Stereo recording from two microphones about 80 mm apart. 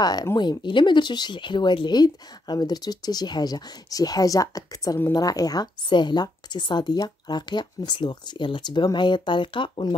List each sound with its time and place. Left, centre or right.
0.4 s a woman's voice: left
5.9 s speech: left